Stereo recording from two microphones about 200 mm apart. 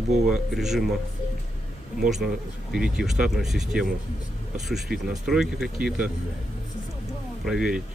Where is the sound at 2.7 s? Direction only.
Centre (ahead or behind).